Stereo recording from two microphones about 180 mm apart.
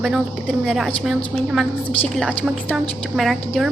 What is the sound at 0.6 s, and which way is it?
A woman's voice, centre (ahead or behind).